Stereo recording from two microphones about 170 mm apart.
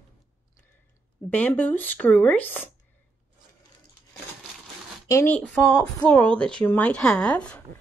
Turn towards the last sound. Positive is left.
turn(degrees=5)  # may be behind; listen again after turning